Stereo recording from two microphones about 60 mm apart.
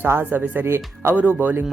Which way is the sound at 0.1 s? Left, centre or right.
Right.